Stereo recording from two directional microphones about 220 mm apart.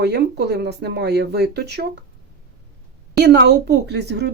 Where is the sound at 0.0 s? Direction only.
50° right (ahead or behind).